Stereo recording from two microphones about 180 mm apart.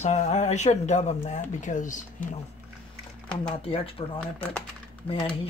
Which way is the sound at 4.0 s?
25° left (ahead or behind).